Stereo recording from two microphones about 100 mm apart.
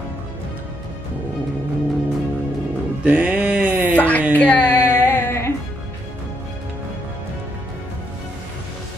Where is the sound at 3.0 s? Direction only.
15° right (ahead or behind).